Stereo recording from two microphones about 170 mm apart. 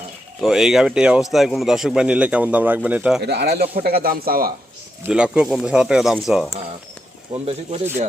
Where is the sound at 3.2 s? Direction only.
75° right (ahead or behind).